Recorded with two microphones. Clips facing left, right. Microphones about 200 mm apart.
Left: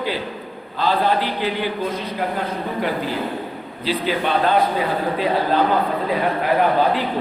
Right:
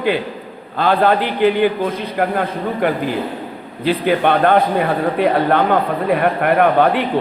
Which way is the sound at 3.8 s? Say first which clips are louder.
Right 6 dB; 55° right (ahead or behind).